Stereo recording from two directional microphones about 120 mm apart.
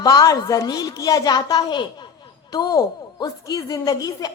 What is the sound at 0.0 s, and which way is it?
A woman's voice, 30° left (ahead or behind).